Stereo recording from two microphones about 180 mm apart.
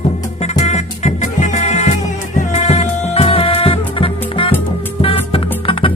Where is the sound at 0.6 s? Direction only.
35° left (ahead or behind).